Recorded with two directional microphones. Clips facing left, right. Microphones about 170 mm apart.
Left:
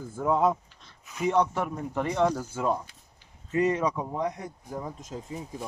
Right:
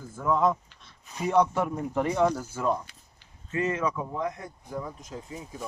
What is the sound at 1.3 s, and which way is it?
Speech, 10° right (ahead or behind).